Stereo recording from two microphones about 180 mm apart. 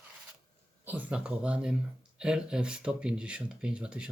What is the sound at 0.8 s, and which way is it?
Speech, 10° right (ahead or behind).